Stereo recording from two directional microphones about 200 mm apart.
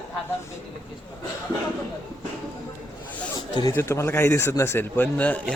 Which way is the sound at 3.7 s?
15° left (ahead or behind).